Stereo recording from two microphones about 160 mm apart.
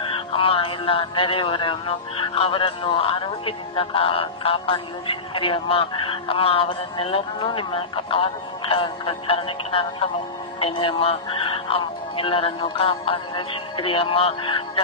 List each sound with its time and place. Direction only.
0.1 s speech: 35° left (ahead or behind)